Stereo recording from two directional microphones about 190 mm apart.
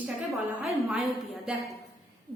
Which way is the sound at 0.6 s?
Centre (ahead or behind).